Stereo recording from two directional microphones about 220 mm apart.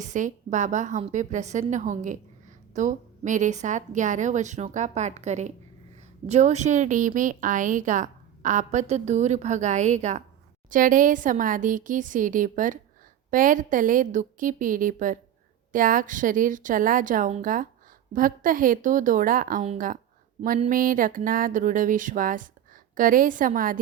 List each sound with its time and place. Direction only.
0.0 s a woman's voice: 35° right (ahead or behind)